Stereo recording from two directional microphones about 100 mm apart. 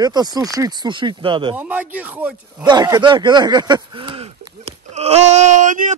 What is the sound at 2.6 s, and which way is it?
A man's voice, 45° right (ahead or behind).